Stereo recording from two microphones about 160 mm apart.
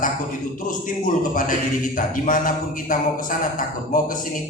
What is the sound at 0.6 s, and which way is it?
A man's voice, 60° left (ahead or behind).